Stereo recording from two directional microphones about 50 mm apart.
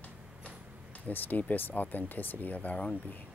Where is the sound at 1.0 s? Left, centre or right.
Left.